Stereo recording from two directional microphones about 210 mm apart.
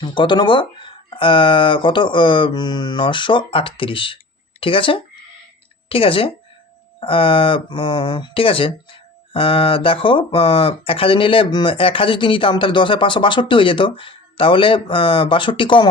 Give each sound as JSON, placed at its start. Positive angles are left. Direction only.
{"t": 0.0, "sound": "speech", "side_deg": 20}